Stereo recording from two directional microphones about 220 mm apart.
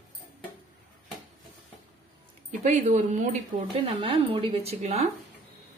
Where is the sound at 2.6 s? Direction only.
35° right (ahead or behind).